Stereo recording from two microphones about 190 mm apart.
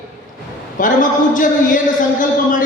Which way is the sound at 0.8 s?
45° left (ahead or behind).